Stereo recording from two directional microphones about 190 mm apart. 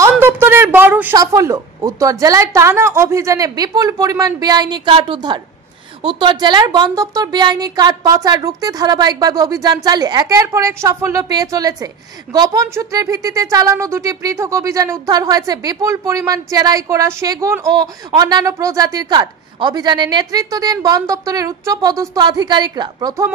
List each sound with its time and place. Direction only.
0.1 s a woman's voice: 10° right (ahead or behind)